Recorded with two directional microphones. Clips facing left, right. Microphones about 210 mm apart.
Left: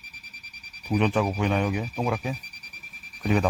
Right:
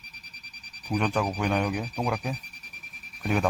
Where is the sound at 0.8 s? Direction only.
5° left (ahead or behind).